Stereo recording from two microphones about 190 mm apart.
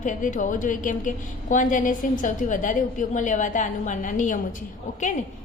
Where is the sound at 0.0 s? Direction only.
40° left (ahead or behind).